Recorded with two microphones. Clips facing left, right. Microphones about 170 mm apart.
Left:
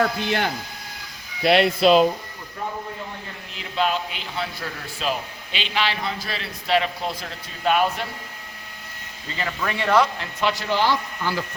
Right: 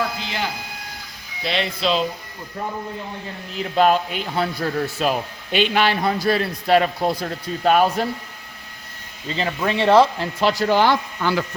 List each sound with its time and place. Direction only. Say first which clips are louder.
0.2 s speech: left 5 dB; 60° left (ahead or behind)
1.5 s speech: left 6 dB; 60° left (ahead or behind)
3.6 s a man's voice: right 7 dB; 45° right (ahead or behind)
9.4 s speech: right 5 dB; 25° right (ahead or behind)
10.8 s speech: right 4 dB; 65° right (ahead or behind)